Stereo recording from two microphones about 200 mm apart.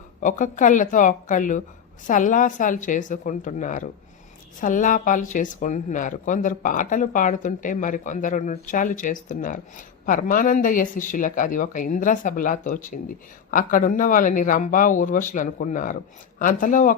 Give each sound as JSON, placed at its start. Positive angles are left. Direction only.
{"t": 0.2, "sound": "speech", "side_deg": 40}